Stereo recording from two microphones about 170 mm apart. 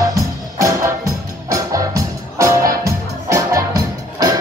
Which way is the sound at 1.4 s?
20° right (ahead or behind).